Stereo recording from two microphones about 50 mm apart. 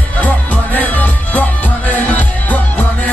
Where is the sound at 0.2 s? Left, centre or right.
Left.